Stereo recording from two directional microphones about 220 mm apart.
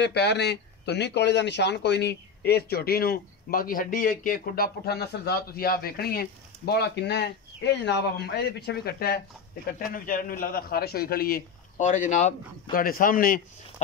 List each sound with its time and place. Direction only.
0.0 s a man's voice: 50° left (ahead or behind)